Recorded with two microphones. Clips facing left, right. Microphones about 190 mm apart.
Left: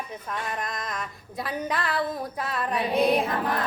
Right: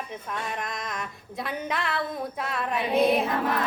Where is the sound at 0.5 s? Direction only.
Centre (ahead or behind).